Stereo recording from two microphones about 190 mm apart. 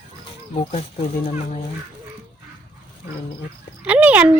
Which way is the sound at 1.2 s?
30° left (ahead or behind).